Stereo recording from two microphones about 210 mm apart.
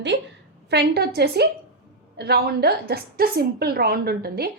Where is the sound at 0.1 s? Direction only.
55° right (ahead or behind).